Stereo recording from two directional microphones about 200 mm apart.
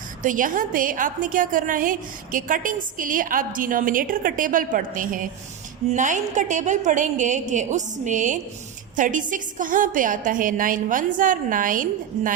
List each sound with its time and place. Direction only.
0.2 s a woman's voice: 40° right (ahead or behind)